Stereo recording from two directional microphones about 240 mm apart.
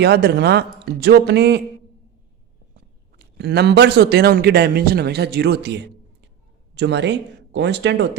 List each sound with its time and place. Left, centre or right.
0.0 s a man's voice: right
2.7 s a man's voice: right